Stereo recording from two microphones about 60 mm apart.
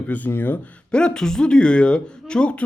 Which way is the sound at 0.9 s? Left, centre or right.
Centre.